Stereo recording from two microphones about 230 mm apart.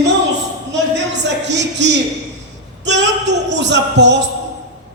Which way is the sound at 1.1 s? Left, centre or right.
Right.